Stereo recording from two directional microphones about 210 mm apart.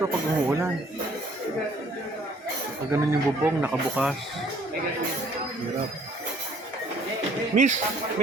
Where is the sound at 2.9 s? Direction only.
15° right (ahead or behind).